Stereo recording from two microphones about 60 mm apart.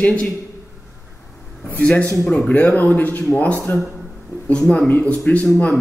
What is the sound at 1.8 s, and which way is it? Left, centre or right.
Speech, left.